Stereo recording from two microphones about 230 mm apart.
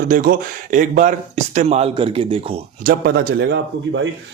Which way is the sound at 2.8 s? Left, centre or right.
Right.